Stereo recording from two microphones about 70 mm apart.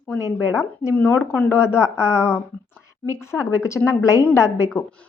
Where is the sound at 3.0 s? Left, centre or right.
Left.